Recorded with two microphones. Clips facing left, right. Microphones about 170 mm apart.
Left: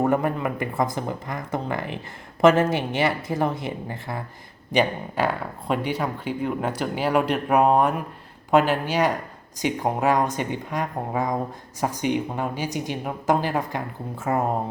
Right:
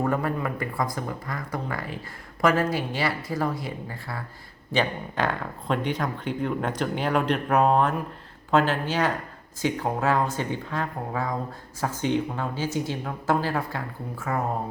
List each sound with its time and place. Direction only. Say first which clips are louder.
0.0 s speech: left 4 dB; 20° left (ahead or behind)